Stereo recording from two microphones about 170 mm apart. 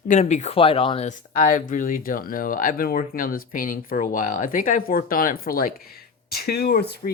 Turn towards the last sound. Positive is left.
turn(degrees=65)  # may be behind; listen again after turning